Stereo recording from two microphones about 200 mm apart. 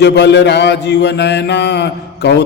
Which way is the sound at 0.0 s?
60° left (ahead or behind).